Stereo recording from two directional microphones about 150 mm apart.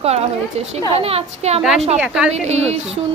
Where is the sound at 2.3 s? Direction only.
50° right (ahead or behind).